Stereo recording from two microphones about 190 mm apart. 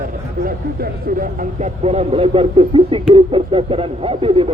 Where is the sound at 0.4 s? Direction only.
50° right (ahead or behind).